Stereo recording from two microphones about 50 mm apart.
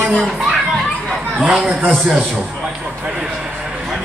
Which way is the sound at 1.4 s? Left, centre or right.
Centre.